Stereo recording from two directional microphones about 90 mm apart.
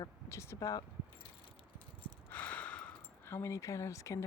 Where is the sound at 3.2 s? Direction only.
30° left (ahead or behind).